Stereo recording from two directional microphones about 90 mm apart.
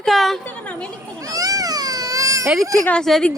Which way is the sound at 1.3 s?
45° right (ahead or behind).